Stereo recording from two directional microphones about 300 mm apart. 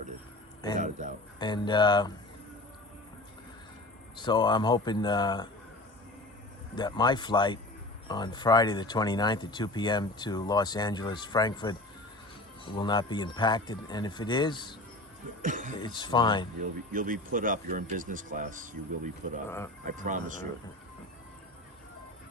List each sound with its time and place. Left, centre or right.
0.8 s speech: right
1.4 s speech: centre
4.2 s speech: centre
6.7 s speech: centre
15.4 s speech: right
15.8 s speech: centre
16.6 s speech: right
19.5 s speech: centre
19.8 s speech: right